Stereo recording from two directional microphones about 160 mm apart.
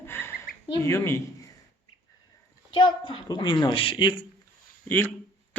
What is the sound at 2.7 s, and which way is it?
A woman's voice, 30° left (ahead or behind).